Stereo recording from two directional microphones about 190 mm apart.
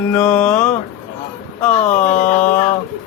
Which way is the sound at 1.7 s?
40° left (ahead or behind).